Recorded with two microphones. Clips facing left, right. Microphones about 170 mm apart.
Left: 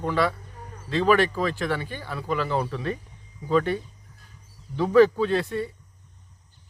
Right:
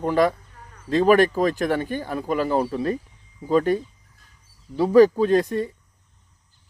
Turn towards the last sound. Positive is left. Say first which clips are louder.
# right 5 dB
turn(degrees=-40)  # may be behind; listen again after turning